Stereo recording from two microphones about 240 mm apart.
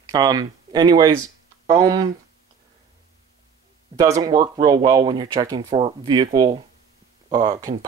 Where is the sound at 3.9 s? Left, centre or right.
Centre.